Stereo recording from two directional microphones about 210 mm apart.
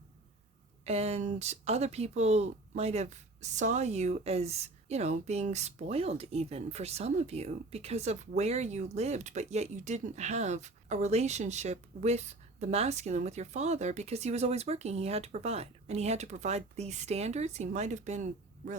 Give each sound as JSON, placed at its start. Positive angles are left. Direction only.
{"t": 0.9, "sound": "speech", "side_deg": -30}